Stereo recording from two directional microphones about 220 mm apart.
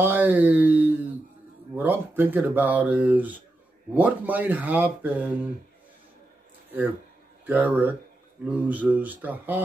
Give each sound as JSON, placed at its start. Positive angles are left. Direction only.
{"t": 0.0, "sound": "a sound", "side_deg": -10}
{"t": 1.8, "sound": "speech", "side_deg": -10}
{"t": 7.4, "sound": "speech", "side_deg": -5}